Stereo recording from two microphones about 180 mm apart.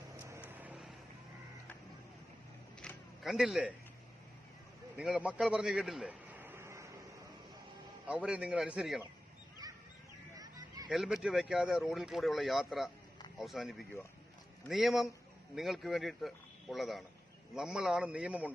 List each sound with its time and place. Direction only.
0.2 s vehicle: 15° right (ahead or behind)
2.8 s a sound: centre (ahead or behind)
4.9 s a man's voice: 5° right (ahead or behind)
8.0 s speech: 5° right (ahead or behind)
10.3 s a sound: 20° right (ahead or behind)
10.8 s speech: 5° right (ahead or behind)